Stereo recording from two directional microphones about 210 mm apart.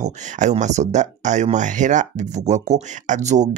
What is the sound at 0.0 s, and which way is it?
Speech, 35° right (ahead or behind).